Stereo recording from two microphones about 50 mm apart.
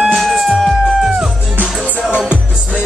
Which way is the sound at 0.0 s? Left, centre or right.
Centre.